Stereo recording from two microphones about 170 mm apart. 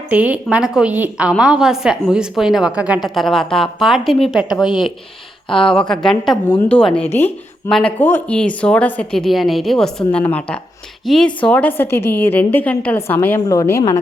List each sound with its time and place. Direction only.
0.1 s a woman's voice: 10° right (ahead or behind)
5.5 s a woman's voice: 30° left (ahead or behind)
5.9 s a woman's voice: 5° left (ahead or behind)